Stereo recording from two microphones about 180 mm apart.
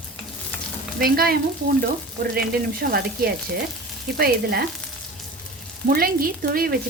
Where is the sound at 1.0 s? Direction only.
55° right (ahead or behind).